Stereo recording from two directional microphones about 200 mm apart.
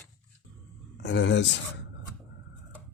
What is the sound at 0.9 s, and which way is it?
Speech, 60° left (ahead or behind).